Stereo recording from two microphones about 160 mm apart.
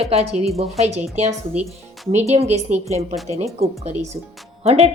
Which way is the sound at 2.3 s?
40° right (ahead or behind).